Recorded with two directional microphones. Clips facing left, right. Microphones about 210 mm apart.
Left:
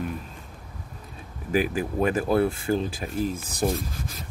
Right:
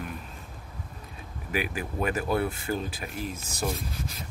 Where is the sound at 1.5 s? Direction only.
35° left (ahead or behind).